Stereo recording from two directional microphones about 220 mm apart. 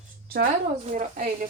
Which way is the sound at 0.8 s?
35° right (ahead or behind).